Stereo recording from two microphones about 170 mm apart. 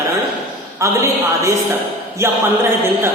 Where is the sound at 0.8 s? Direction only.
15° right (ahead or behind).